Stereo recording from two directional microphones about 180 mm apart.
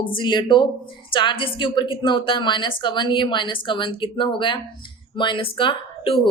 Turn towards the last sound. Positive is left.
turn(degrees=30)  # may be behind; listen again after turning